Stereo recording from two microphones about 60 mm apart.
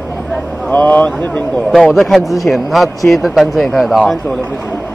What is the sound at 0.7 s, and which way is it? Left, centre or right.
Speech, left.